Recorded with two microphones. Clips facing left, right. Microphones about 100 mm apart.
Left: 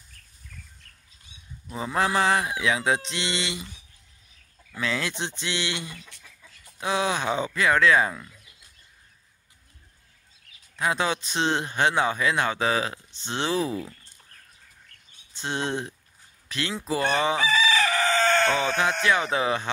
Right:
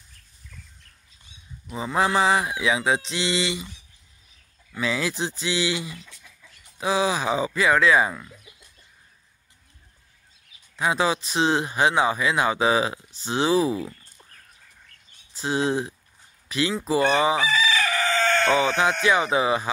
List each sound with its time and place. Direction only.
1.7 s speech: 5° right (ahead or behind)
4.7 s speech: 5° right (ahead or behind)
10.8 s speech: 5° right (ahead or behind)
15.3 s speech: 5° right (ahead or behind)
17.7 s chicken: 25° left (ahead or behind)
18.5 s speech: 10° right (ahead or behind)